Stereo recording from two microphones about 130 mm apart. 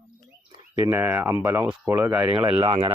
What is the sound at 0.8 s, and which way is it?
Speech, 15° right (ahead or behind).